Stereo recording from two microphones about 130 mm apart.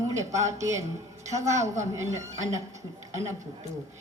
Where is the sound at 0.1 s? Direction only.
25° right (ahead or behind).